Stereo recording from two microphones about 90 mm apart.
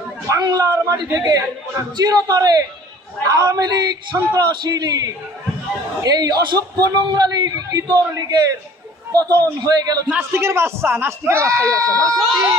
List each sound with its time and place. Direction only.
0.4 s a man's voice: 45° right (ahead or behind)
10.0 s speech: 20° right (ahead or behind); by 12.2 s 40° right (ahead or behind)